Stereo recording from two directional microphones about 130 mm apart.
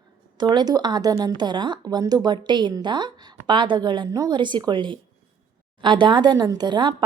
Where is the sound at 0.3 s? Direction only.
35° right (ahead or behind).